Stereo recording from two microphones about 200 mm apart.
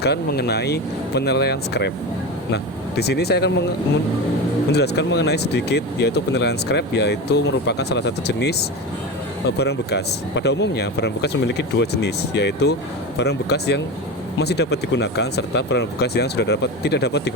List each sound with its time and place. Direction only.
0.0 s speech: 55° left (ahead or behind)
3.0 s speech: 55° left (ahead or behind)
4.7 s speech: 55° left (ahead or behind)
9.6 s speech: 55° left (ahead or behind)